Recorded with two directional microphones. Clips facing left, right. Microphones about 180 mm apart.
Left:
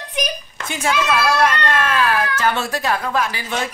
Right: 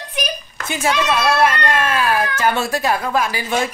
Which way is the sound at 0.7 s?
5° right (ahead or behind).